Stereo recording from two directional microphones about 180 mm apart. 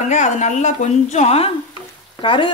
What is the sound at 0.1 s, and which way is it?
Speech, 40° left (ahead or behind).